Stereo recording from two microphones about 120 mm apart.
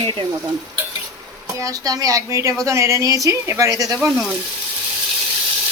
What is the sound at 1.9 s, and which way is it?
Speech, 30° right (ahead or behind).